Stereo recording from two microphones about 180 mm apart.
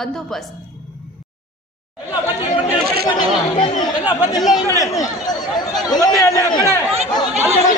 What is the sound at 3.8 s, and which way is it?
Speech, 20° left (ahead or behind).